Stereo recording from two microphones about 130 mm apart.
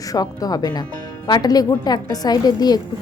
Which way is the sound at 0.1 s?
30° left (ahead or behind).